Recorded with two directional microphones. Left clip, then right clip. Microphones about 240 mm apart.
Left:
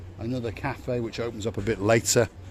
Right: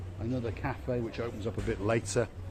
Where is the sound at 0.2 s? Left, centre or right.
Left.